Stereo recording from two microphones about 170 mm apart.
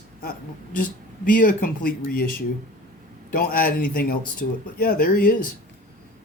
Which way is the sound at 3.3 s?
60° left (ahead or behind).